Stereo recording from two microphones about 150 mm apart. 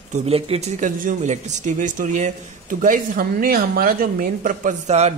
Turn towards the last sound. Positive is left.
turn(degrees=-50)  # may be behind; listen again after turning